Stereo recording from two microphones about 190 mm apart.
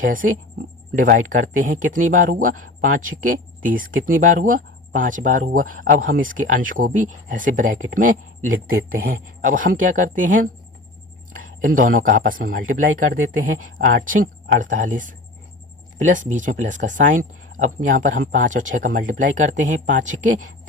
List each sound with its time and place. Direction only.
0.0 s speech: 45° right (ahead or behind)
2.6 s speech: 90° right
3.6 s speech: 45° right (ahead or behind)
11.3 s a sound: 45° right (ahead or behind)
11.9 s speech: 45° right (ahead or behind)